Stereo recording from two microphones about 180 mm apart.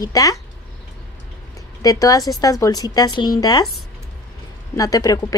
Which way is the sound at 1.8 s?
20° left (ahead or behind).